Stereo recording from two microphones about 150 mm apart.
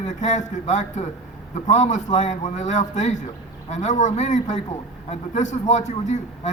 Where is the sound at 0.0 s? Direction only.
50° left (ahead or behind).